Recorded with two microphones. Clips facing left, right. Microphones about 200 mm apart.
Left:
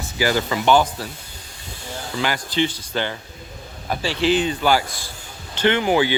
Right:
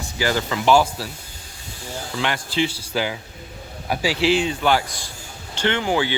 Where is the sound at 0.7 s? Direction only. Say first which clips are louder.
Right 1 dB; centre (ahead or behind).